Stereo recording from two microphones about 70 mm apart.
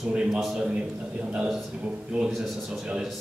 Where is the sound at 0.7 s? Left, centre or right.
Centre.